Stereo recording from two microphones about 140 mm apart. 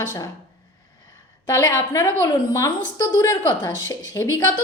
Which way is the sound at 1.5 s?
25° left (ahead or behind).